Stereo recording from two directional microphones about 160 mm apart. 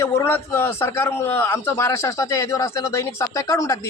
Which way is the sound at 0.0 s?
15° left (ahead or behind).